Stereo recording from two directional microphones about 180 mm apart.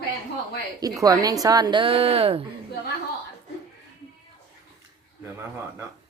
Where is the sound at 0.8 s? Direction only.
20° right (ahead or behind).